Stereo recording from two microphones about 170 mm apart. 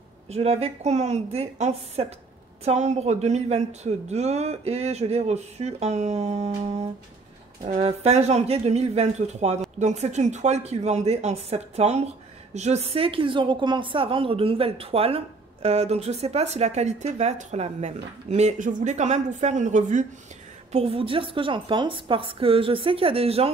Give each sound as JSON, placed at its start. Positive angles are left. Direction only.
{"t": 0.3, "sound": "a woman's voice", "side_deg": -35}
{"t": 20.7, "sound": "a woman's voice", "side_deg": -35}